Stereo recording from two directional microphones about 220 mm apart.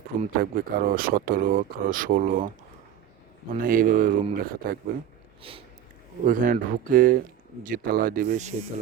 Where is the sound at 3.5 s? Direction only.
40° right (ahead or behind).